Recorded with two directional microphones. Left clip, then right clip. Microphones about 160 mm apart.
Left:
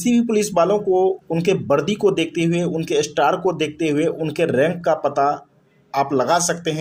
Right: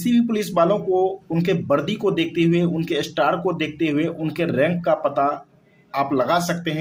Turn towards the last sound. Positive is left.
turn(degrees=35)  # may be behind; listen again after turning